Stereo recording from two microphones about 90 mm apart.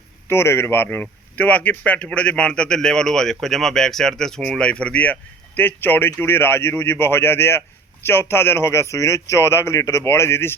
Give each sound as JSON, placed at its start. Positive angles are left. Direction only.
{"t": 0.3, "sound": "a man's voice", "side_deg": 25}